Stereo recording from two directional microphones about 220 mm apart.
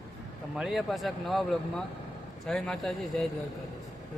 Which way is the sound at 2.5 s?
5° left (ahead or behind).